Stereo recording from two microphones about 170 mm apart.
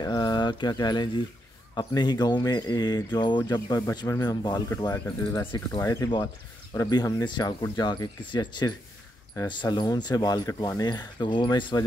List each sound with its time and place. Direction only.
0.0 s speech: 25° left (ahead or behind)